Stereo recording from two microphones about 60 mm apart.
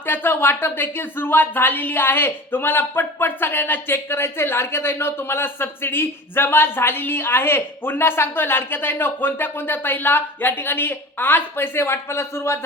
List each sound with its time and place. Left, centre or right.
0.0 s speech: left